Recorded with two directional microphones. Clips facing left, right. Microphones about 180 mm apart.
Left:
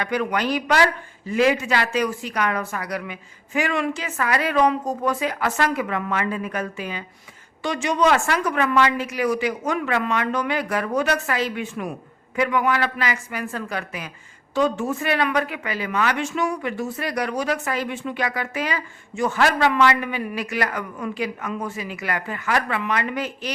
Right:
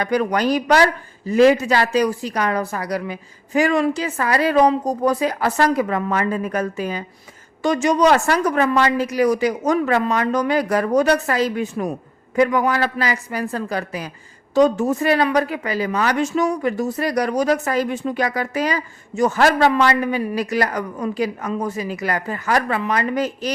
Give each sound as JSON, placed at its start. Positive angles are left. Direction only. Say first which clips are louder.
{"t": 0.0, "sound": "speech", "louder": "right 4 dB", "side_deg": -40}